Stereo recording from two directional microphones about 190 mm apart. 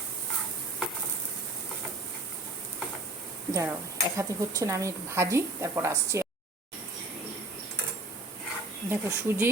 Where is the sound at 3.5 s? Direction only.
15° right (ahead or behind).